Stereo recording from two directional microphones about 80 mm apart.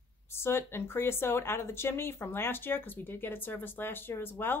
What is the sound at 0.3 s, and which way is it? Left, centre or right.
A woman's voice, left.